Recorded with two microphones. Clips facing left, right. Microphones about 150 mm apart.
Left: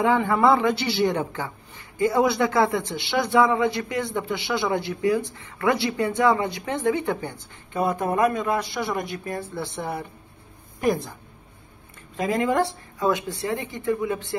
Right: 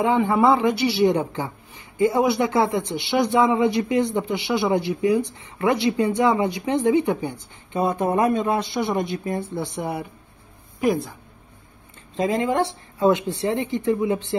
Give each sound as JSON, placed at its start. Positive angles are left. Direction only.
{"t": 0.0, "sound": "a woman's voice", "side_deg": -15}
{"t": 10.8, "sound": "a woman's voice", "side_deg": -5}
{"t": 12.2, "sound": "speech", "side_deg": -25}